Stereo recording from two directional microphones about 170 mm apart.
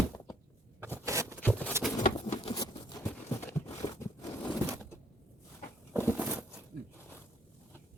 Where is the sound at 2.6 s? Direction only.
25° left (ahead or behind).